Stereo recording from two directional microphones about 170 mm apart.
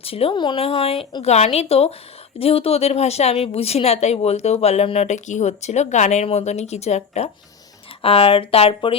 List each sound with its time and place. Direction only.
0.0 s speech: 35° left (ahead or behind)